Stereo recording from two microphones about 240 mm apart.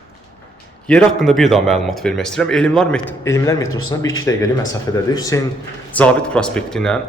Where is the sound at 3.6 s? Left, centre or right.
Left.